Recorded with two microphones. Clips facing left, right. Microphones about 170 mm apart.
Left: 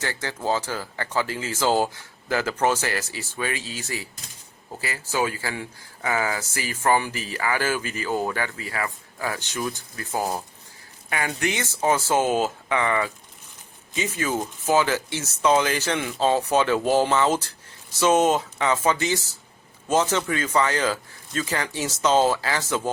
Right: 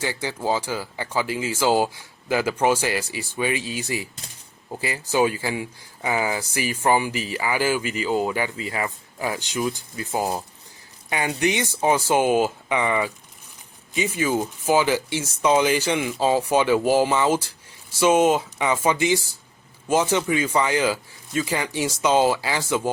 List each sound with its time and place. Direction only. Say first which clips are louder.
0.0 s speech: right 2 dB; 10° right (ahead or behind)